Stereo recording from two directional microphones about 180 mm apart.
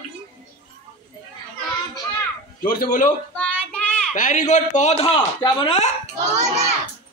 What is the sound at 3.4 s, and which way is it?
Child singing, 5° left (ahead or behind).